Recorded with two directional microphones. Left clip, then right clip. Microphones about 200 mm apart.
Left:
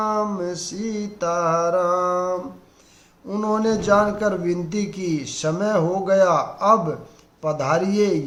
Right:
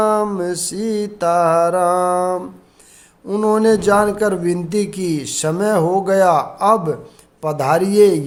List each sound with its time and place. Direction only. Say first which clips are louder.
0.0 s speech: right 6 dB; 55° right (ahead or behind)